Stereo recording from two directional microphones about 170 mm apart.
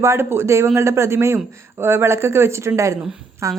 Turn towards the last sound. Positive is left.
turn(degrees=-20)  # may be behind; listen again after turning